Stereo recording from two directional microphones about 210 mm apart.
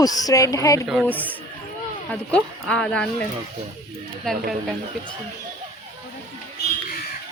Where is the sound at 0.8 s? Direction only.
Centre (ahead or behind).